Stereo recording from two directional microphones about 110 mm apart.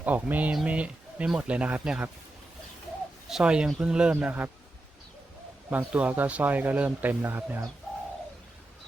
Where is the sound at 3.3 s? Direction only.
10° right (ahead or behind).